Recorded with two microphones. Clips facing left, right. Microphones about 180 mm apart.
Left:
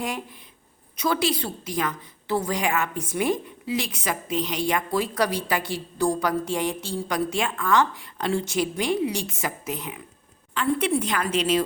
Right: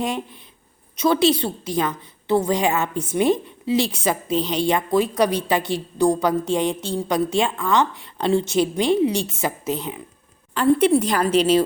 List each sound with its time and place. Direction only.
0.9 s a woman's voice: 25° right (ahead or behind)